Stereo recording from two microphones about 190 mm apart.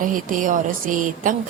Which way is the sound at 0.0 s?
45° right (ahead or behind).